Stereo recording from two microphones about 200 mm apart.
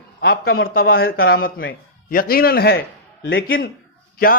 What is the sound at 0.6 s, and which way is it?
Speech, 45° left (ahead or behind).